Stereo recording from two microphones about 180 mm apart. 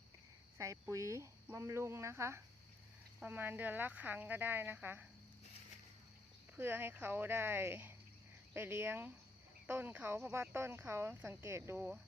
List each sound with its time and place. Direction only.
0.6 s speech: 15° right (ahead or behind)
6.6 s speech: 10° right (ahead or behind)